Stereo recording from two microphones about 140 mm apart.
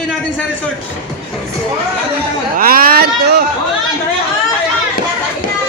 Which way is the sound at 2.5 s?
90° right.